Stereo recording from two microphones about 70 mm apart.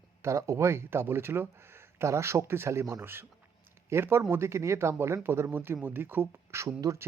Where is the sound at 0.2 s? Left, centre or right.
Right.